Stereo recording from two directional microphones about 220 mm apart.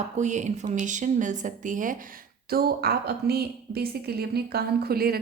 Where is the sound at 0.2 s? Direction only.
35° right (ahead or behind).